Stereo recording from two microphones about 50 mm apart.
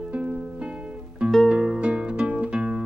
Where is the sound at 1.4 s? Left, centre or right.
Centre.